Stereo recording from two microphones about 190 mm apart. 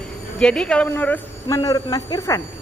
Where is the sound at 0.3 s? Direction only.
5° left (ahead or behind).